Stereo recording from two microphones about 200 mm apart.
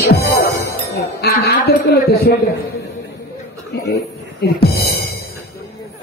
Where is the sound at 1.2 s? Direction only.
50° left (ahead or behind).